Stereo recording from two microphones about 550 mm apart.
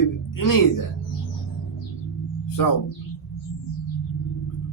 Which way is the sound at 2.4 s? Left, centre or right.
Left.